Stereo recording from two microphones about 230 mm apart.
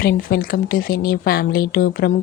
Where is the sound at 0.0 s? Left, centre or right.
Left.